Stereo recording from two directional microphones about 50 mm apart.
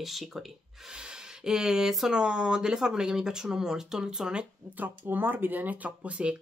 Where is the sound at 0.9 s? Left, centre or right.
Centre.